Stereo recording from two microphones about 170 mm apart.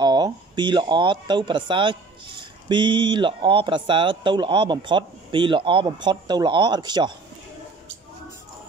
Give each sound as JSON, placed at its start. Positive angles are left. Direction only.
{"t": 0.0, "sound": "speech", "side_deg": -25}